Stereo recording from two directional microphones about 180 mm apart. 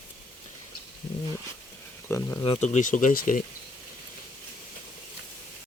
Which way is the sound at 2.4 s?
35° left (ahead or behind).